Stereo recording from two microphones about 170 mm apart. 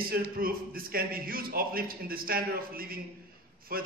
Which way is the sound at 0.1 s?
60° right (ahead or behind).